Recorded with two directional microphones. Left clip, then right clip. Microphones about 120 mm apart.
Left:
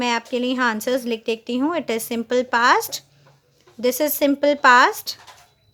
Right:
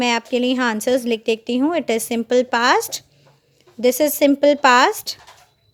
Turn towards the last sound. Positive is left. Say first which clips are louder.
# even
turn(degrees=-35)  # may be behind; listen again after turning